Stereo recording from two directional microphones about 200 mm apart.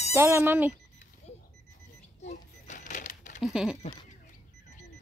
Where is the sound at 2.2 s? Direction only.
40° left (ahead or behind).